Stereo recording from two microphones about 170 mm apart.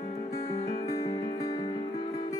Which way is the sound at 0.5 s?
40° left (ahead or behind).